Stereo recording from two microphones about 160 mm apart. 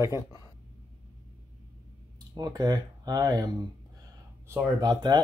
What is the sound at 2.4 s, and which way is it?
Speech, 25° right (ahead or behind).